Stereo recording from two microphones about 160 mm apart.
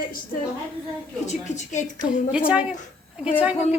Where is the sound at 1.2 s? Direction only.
50° left (ahead or behind).